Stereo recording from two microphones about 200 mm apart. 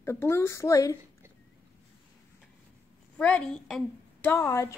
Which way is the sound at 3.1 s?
5° left (ahead or behind).